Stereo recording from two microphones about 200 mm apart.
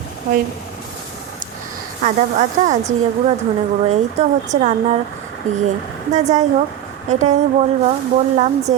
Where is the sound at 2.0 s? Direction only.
35° right (ahead or behind).